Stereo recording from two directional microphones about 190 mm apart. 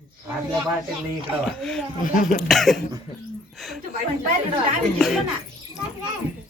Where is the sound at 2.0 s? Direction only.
45° left (ahead or behind).